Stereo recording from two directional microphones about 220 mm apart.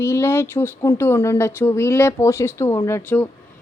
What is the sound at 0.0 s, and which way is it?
A woman's voice, 10° left (ahead or behind).